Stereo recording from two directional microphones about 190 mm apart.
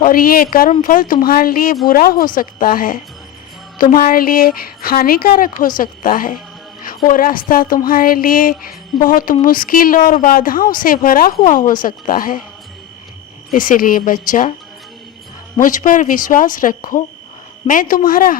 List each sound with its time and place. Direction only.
0.0 s a woman's voice: 50° left (ahead or behind)
13.5 s speech: 45° left (ahead or behind)
15.5 s speech: 45° left (ahead or behind)